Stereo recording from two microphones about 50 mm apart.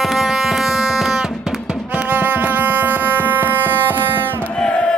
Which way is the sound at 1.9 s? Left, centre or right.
Right.